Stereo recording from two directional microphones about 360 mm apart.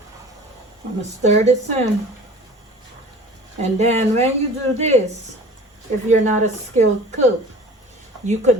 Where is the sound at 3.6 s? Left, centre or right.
Centre.